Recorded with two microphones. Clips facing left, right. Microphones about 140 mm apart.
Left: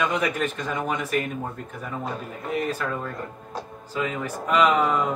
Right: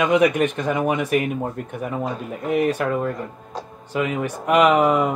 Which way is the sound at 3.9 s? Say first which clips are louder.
Right 5 dB; 65° right (ahead or behind).